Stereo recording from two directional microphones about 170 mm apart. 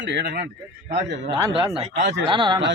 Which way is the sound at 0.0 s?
85° right.